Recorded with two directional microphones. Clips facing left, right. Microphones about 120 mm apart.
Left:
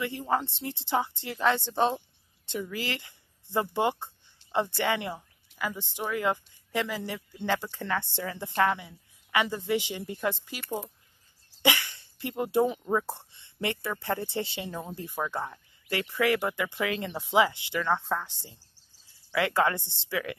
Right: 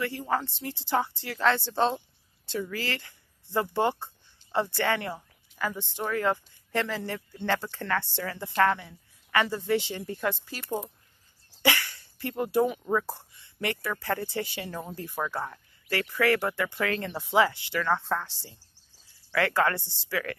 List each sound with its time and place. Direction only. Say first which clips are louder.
0.0 s speech: even; 20° left (ahead or behind)
11.6 s speech: even; 20° left (ahead or behind)